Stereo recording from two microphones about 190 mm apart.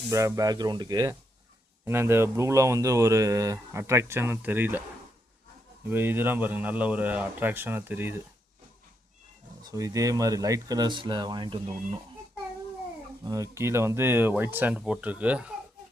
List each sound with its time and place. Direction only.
0.1 s speech: 15° right (ahead or behind)
5.9 s speech: 10° right (ahead or behind)
9.6 s speech: 20° right (ahead or behind)
13.2 s speech: 15° right (ahead or behind)